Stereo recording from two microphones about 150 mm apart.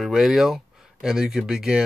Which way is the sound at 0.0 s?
5° right (ahead or behind).